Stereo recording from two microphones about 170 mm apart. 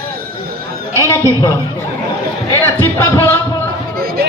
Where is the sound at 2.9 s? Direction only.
15° left (ahead or behind).